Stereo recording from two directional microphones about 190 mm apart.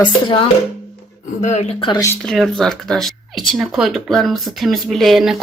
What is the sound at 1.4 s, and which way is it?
Speech, 40° left (ahead or behind).